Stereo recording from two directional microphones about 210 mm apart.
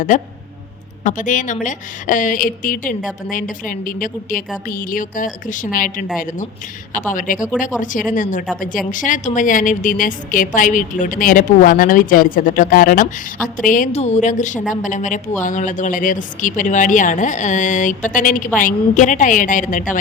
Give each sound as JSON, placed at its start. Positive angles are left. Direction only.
{"t": 1.0, "sound": "speech", "side_deg": 35}
{"t": 7.1, "sound": "speech", "side_deg": 40}